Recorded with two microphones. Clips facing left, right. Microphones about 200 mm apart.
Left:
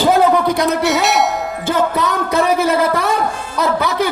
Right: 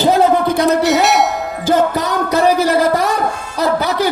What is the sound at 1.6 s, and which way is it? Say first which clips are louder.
Music: right 3 dB; 35° right (ahead or behind).